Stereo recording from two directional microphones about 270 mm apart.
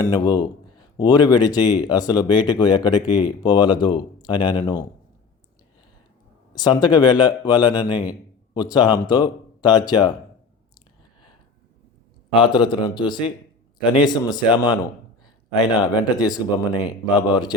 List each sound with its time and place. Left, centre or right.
0.0 s speech: centre
6.5 s speech: centre
12.3 s speech: centre